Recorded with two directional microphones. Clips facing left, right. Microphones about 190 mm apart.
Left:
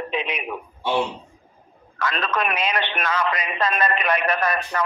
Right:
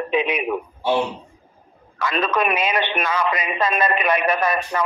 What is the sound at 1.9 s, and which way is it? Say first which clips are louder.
A man's voice: right 3 dB; 10° right (ahead or behind).